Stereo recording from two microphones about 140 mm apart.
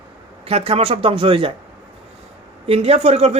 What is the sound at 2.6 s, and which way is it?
Speech, 45° right (ahead or behind).